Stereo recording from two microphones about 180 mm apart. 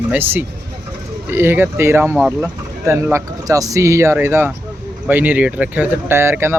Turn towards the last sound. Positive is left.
turn(degrees=-15)  # may be behind; listen again after turning